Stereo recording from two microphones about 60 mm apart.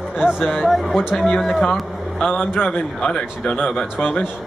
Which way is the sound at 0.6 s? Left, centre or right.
Centre.